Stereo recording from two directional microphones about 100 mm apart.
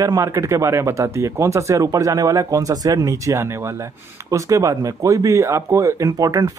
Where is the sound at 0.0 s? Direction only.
35° right (ahead or behind).